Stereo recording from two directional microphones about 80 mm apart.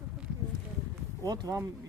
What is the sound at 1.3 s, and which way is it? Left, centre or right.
Speech, right.